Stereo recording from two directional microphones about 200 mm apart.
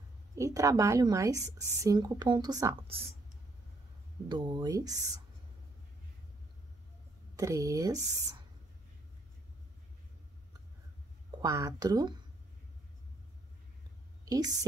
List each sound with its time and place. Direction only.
0.4 s a woman's voice: 15° right (ahead or behind)
4.3 s speech: 20° right (ahead or behind)
7.3 s a woman's voice: 15° right (ahead or behind)
11.4 s speech: 15° right (ahead or behind)
14.2 s a woman's voice: 20° right (ahead or behind)